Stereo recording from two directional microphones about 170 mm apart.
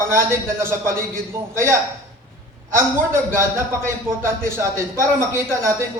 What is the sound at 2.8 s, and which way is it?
A man's voice, 15° right (ahead or behind).